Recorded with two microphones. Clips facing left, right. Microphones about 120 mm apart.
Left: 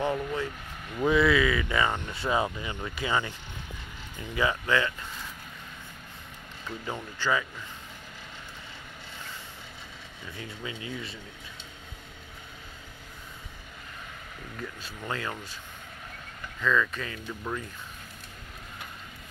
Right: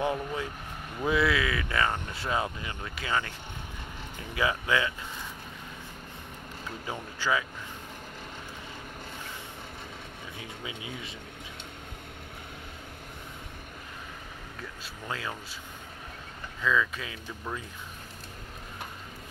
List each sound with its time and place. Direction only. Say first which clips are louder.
0.0 s speech: left 1 dB; 10° right (ahead or behind); by 3.3 s 10° left (ahead or behind)
4.4 s speech: left 1 dB; 5° right (ahead or behind)
6.9 s speech: left 1 dB; 5° right (ahead or behind)
10.6 s speech: left 3 dB; 15° right (ahead or behind)
14.6 s speech: left 4 dB; centre (ahead or behind)
16.6 s speech: left 1 dB; 5° right (ahead or behind)